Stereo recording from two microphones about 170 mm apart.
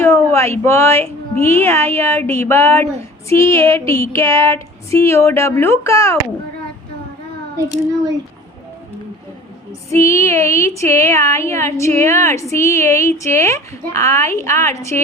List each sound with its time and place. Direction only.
0.0 s speech: 15° left (ahead or behind)
9.9 s speech: 15° left (ahead or behind)